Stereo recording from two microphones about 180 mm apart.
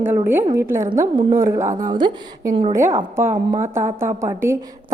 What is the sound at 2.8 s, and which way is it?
A woman's voice, 15° right (ahead or behind).